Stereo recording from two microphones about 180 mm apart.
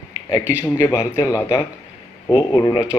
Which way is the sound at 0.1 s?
20° left (ahead or behind).